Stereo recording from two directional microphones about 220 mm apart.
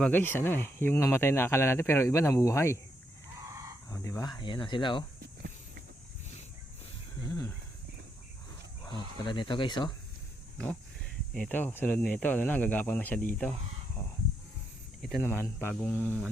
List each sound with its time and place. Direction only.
0.0 s speech: 10° left (ahead or behind)
3.8 s speech: 15° left (ahead or behind)
7.3 s speech: 15° left (ahead or behind)
8.8 s speech: 20° left (ahead or behind)
11.3 s speech: 5° left (ahead or behind)
15.0 s speech: 5° left (ahead or behind)